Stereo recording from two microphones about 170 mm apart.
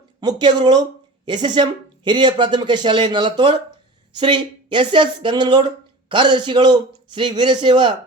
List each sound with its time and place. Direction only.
0.2 s speech: 25° right (ahead or behind)